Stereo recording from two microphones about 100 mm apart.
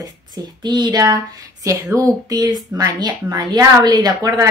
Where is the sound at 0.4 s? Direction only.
45° right (ahead or behind).